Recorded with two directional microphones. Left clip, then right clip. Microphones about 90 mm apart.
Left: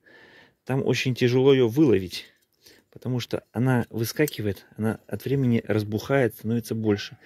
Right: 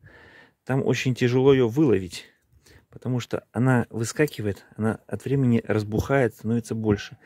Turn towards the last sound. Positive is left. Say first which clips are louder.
# even
turn(degrees=-40)  # may be behind; listen again after turning